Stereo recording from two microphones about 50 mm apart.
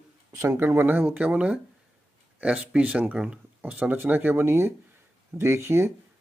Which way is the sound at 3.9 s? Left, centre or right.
Right.